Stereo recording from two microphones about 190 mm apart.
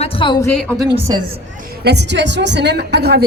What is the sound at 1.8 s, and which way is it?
A woman's voice, 65° right (ahead or behind).